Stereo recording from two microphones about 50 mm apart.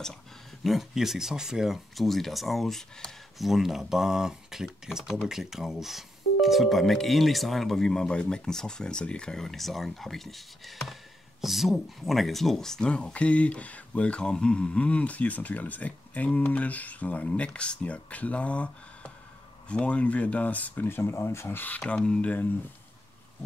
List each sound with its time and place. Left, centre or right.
0.7 s speech: centre
2.0 s speech: centre
9.4 s speech: centre; by 20.9 s left
20.9 s speech: left
21.5 s speech: left